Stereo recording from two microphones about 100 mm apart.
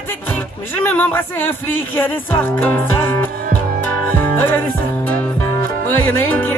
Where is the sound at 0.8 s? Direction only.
20° left (ahead or behind).